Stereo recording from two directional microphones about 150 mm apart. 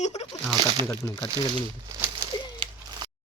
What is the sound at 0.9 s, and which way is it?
Speech, 25° left (ahead or behind).